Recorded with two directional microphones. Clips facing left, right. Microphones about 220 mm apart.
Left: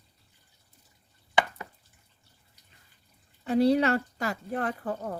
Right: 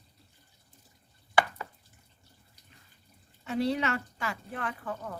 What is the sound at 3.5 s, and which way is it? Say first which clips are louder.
Speech: left 7 dB; 40° left (ahead or behind).